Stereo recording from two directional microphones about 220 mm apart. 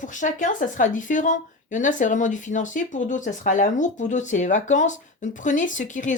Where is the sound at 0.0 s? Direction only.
35° left (ahead or behind).